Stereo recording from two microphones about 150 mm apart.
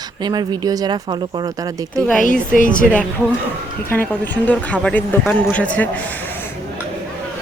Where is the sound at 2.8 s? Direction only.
Centre (ahead or behind).